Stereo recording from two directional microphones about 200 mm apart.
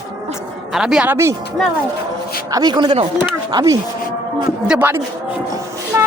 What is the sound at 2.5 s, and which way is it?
Speech, 20° right (ahead or behind).